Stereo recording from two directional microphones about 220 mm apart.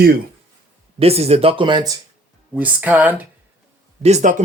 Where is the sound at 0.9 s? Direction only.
25° right (ahead or behind).